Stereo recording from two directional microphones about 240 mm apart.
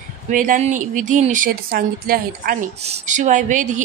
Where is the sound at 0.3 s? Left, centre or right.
Right.